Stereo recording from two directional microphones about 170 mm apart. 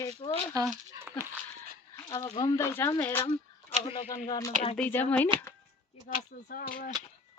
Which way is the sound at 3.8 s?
35° left (ahead or behind).